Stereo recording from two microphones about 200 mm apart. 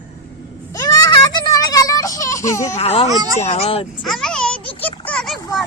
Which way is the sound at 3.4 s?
30° left (ahead or behind).